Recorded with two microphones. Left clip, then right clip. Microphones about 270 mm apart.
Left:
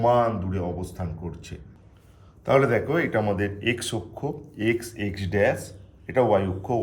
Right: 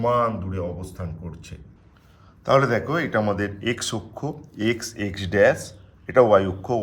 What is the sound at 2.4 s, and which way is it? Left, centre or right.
A man's voice, centre.